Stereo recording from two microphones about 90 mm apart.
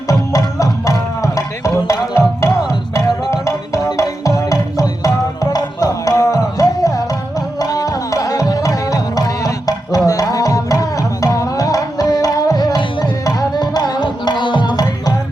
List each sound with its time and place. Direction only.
0.1 s music: 40° left (ahead or behind)
10.1 s tabla: 40° left (ahead or behind)